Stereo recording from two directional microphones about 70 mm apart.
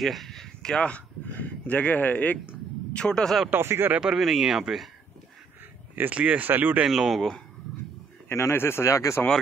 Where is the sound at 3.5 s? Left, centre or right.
Right.